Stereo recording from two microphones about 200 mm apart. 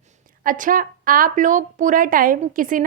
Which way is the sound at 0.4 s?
40° right (ahead or behind).